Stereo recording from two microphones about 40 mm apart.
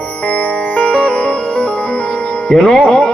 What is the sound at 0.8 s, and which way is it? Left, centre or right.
Music, left.